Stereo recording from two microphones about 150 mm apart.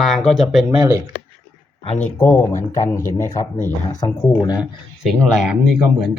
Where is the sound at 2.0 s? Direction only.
15° left (ahead or behind).